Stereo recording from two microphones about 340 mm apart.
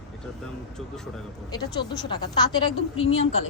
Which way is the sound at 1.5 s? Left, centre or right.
Centre.